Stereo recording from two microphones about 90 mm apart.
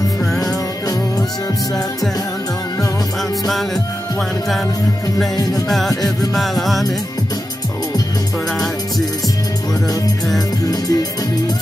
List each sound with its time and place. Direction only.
5.3 s music: 45° left (ahead or behind)
5.7 s music: 5° left (ahead or behind)
10.7 s music: 45° left (ahead or behind)